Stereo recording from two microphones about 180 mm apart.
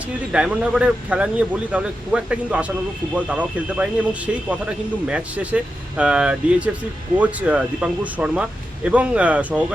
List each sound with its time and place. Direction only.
0.3 s speech: 5° right (ahead or behind)